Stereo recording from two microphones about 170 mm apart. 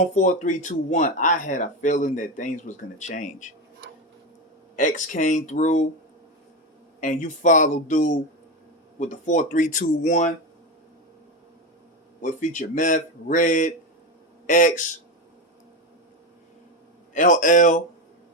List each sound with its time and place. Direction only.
0.0 s speech: 45° left (ahead or behind)
4.8 s speech: 50° left (ahead or behind)
7.0 s speech: 50° left (ahead or behind)
12.2 s speech: 50° left (ahead or behind)
17.2 s speech: 50° left (ahead or behind)